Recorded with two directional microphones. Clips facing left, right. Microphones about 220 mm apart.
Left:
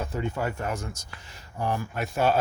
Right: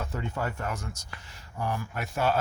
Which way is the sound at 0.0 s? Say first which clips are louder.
Left 3 dB; 15° left (ahead or behind).